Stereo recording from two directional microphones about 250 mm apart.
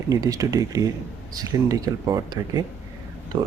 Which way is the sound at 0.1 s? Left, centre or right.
Centre.